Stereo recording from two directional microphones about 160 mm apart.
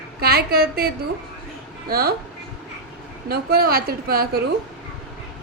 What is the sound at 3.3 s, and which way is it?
A woman's voice, 70° right (ahead or behind).